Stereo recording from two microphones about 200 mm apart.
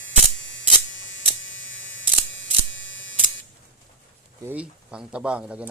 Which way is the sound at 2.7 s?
70° left (ahead or behind).